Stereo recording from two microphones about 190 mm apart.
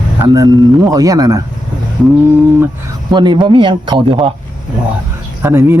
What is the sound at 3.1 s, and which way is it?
Speech, 25° right (ahead or behind).